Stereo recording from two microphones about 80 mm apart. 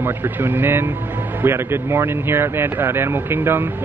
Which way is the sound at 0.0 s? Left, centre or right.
Right.